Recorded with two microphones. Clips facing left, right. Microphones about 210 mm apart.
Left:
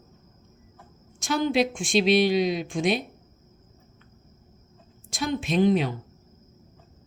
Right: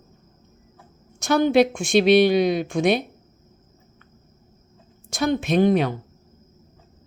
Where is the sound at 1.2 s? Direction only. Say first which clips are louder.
Right 6 dB; 65° right (ahead or behind).